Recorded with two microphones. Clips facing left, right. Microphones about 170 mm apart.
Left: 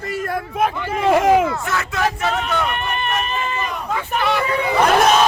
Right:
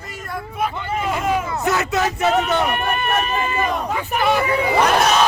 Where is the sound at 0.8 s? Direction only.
80° left.